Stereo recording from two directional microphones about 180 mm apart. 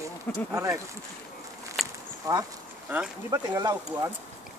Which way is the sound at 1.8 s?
Centre (ahead or behind).